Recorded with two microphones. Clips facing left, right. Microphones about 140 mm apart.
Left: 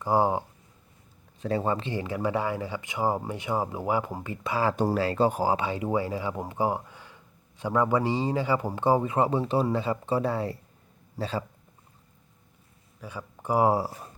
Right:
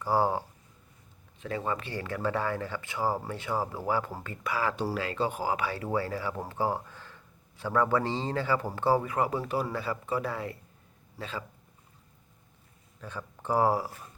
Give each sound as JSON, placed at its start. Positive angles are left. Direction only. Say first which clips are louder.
{"t": 0.0, "sound": "speech", "louder": "left 3 dB", "side_deg": 15}
{"t": 1.4, "sound": "speech", "louder": "left 5 dB", "side_deg": 30}
{"t": 1.9, "sound": "speech", "louder": "left 3 dB", "side_deg": 15}
{"t": 4.8, "sound": "speech", "louder": "left 6 dB", "side_deg": 40}
{"t": 5.5, "sound": "a man's voice", "louder": "left 3 dB", "side_deg": 20}
{"t": 13.0, "sound": "speech", "louder": "left 1 dB", "side_deg": 10}
{"t": 13.7, "sound": "speech", "louder": "left 4 dB", "side_deg": 35}